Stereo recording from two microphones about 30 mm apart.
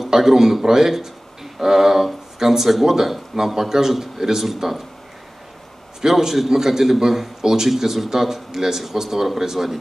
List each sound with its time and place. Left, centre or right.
0.0 s a man's voice: centre
5.9 s a man's voice: centre